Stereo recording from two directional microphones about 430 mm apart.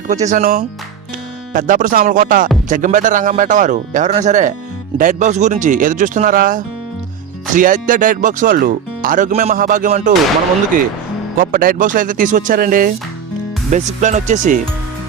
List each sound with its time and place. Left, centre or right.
0.1 s speech: centre
11.3 s speech: centre